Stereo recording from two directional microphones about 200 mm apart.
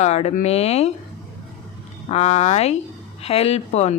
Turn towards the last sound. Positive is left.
turn(degrees=35)  # may be behind; listen again after turning